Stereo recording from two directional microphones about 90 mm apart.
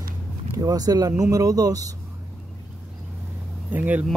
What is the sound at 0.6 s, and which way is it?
Speech, 45° right (ahead or behind).